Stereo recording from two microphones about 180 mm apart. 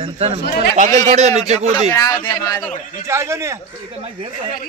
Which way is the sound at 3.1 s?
15° right (ahead or behind).